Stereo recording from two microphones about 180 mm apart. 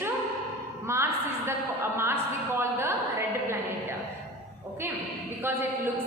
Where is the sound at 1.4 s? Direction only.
15° right (ahead or behind).